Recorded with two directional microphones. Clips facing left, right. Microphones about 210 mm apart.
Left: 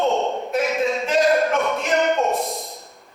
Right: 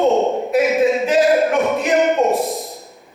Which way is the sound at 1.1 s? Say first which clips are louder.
Right 1 dB; centre (ahead or behind).